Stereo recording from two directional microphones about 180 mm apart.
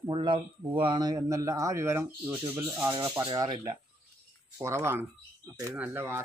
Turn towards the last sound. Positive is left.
turn(degrees=-15)  # may be behind; listen again after turning